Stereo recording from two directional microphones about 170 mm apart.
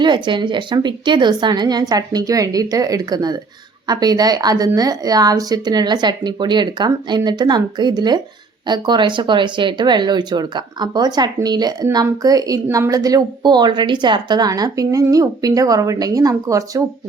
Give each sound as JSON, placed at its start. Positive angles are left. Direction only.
{"t": 0.0, "sound": "speech", "side_deg": -25}